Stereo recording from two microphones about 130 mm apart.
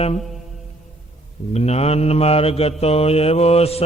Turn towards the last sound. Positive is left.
turn(degrees=50)  # may be behind; listen again after turning